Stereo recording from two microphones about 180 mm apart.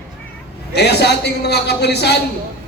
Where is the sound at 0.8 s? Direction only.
65° left (ahead or behind).